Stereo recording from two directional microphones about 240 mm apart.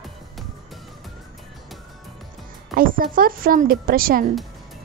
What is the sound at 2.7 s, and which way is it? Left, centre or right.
A woman's voice, right.